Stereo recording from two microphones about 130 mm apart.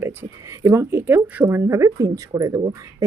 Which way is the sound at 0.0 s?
20° right (ahead or behind).